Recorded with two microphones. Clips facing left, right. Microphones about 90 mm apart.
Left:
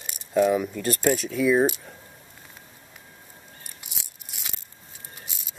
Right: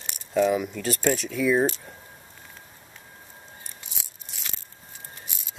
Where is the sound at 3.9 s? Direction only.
15° left (ahead or behind).